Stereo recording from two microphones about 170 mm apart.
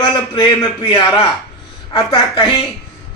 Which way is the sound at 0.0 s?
25° left (ahead or behind).